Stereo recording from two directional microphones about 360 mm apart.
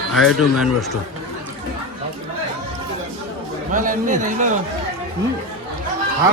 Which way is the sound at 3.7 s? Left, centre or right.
Right.